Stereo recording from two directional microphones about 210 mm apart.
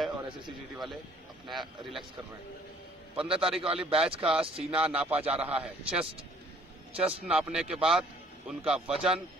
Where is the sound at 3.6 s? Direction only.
25° right (ahead or behind).